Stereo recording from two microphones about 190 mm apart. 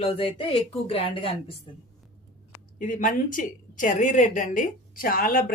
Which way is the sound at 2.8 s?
45° left (ahead or behind).